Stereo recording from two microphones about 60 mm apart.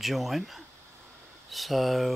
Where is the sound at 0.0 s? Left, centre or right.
Centre.